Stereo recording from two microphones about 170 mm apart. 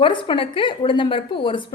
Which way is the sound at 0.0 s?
30° left (ahead or behind).